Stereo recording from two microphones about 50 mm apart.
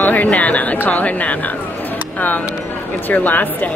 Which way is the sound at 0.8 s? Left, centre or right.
Left.